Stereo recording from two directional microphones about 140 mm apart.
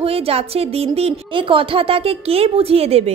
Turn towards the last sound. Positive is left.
turn(degrees=-45)  # may be behind; listen again after turning